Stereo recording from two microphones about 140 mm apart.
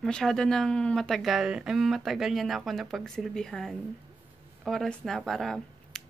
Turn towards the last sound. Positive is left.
turn(degrees=0)  # may be behind; listen again after turning